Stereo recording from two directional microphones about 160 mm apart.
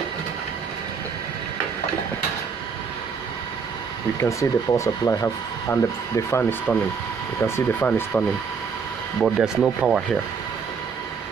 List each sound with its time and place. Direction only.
4.2 s speech: 20° left (ahead or behind)
9.2 s speech: 5° right (ahead or behind)